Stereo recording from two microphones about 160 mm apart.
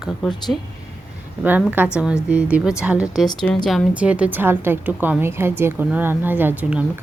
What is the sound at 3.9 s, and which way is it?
A woman's voice, 10° right (ahead or behind).